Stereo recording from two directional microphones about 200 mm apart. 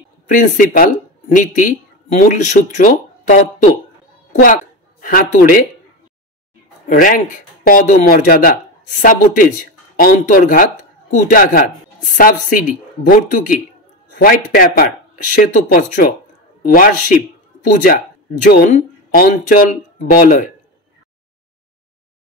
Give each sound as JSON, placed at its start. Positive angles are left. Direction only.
{"t": 0.3, "sound": "a woman's voice", "side_deg": 40}
{"t": 6.9, "sound": "a man's voice", "side_deg": 40}
{"t": 18.4, "sound": "speech", "side_deg": 40}